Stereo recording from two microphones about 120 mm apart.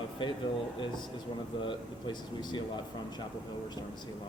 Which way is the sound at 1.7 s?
40° left (ahead or behind).